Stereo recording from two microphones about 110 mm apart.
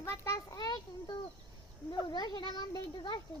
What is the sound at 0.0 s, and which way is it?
A child's voice, 25° left (ahead or behind).